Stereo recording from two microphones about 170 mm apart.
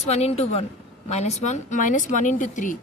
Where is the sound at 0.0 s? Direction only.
40° left (ahead or behind).